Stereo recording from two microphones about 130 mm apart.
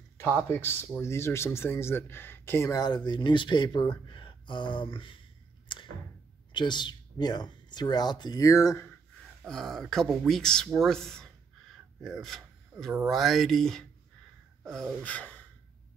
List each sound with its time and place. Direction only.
0.2 s speech: 20° left (ahead or behind); by 5.2 s 40° left (ahead or behind)
5.7 s arrow: 35° left (ahead or behind)
6.5 s speech: 35° left (ahead or behind)
9.4 s speech: 5° left (ahead or behind)